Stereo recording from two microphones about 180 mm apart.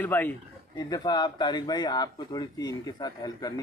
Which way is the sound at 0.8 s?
20° left (ahead or behind).